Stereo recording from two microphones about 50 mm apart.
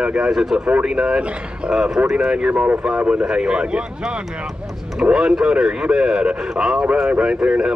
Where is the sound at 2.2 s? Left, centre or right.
Right.